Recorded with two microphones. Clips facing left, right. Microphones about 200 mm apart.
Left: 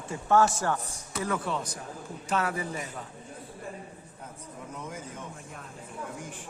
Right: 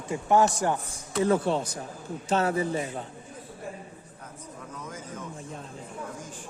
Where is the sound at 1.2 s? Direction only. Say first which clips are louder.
Right 7 dB; 30° right (ahead or behind).